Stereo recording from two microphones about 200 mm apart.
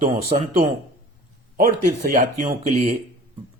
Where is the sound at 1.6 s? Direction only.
45° right (ahead or behind).